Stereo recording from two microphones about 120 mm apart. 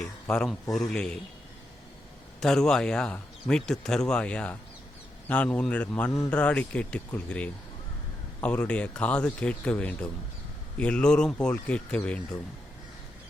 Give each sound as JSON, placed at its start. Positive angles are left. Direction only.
{"t": 0.0, "sound": "speech", "side_deg": 5}
{"t": 2.4, "sound": "a man's voice", "side_deg": 5}